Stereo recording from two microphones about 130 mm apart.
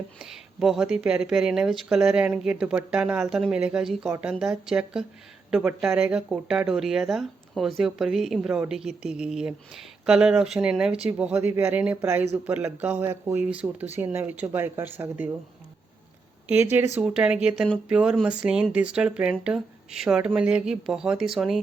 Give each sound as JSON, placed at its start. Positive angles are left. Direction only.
{"t": 0.2, "sound": "speech", "side_deg": -5}
{"t": 16.5, "sound": "speech", "side_deg": -15}